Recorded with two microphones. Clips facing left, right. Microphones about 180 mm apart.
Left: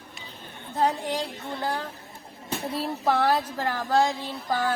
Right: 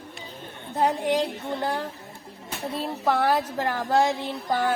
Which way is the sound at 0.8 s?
20° right (ahead or behind).